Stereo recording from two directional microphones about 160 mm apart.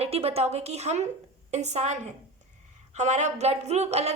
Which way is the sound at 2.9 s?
45° right (ahead or behind).